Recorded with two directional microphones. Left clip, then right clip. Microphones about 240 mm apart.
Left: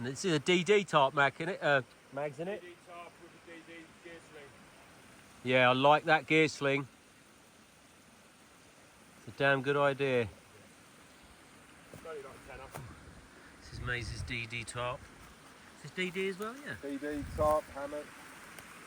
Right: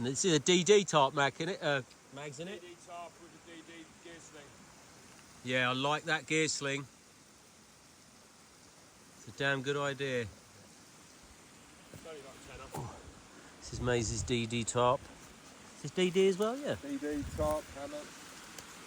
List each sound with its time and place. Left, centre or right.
0.0 s speech: centre
5.5 s speech: centre
9.4 s speech: centre
13.6 s speech: centre
16.0 s speech: centre
17.1 s speech: left